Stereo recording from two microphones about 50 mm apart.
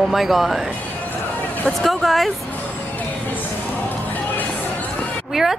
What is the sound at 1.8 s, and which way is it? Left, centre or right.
Speech, centre.